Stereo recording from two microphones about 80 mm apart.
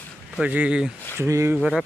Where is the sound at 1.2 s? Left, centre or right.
Right.